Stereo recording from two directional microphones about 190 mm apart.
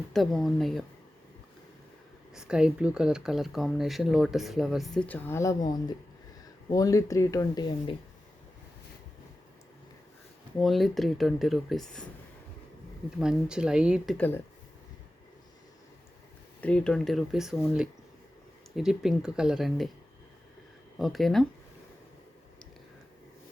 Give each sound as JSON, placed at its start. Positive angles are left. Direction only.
{"t": 0.1, "sound": "speech", "side_deg": 0}
{"t": 2.3, "sound": "speech", "side_deg": -5}
{"t": 6.7, "sound": "speech", "side_deg": 20}
{"t": 10.6, "sound": "speech", "side_deg": 0}
{"t": 13.1, "sound": "speech", "side_deg": -5}
{"t": 14.2, "sound": "speech", "side_deg": 10}
{"t": 16.6, "sound": "speech", "side_deg": 5}
{"t": 21.0, "sound": "speech", "side_deg": 0}